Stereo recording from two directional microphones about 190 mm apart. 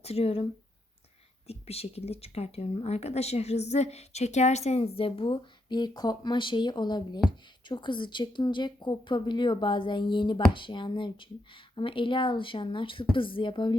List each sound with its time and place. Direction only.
0.0 s speech: 30° left (ahead or behind)
1.5 s speech: 30° left (ahead or behind)